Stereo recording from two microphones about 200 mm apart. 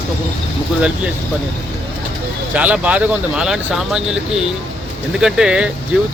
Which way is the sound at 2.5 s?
5° right (ahead or behind).